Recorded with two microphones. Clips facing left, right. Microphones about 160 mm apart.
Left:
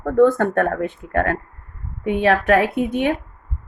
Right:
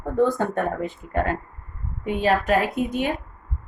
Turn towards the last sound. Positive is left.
turn(degrees=60)  # may be behind; listen again after turning